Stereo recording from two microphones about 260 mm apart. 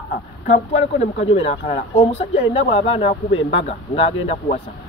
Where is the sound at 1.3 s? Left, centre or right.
Left.